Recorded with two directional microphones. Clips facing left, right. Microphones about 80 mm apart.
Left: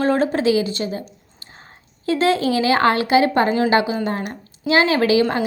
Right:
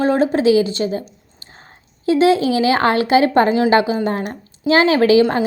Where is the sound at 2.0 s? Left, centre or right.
Centre.